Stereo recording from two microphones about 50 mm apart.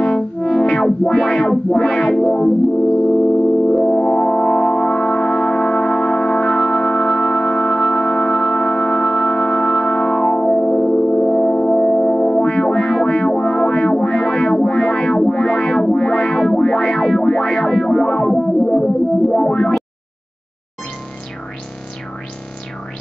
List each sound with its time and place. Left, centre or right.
0.0 s music: centre
3.7 s music: centre